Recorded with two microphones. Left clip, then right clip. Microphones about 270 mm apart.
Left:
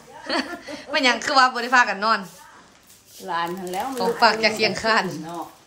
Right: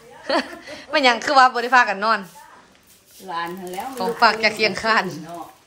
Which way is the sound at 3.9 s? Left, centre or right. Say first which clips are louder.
Right 1 dB; centre.